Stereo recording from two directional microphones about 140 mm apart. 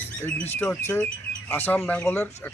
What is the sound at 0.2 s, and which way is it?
A man's voice, 10° left (ahead or behind).